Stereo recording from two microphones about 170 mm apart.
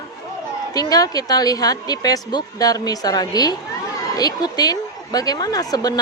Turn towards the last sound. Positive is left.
turn(degrees=20)  # may be behind; listen again after turning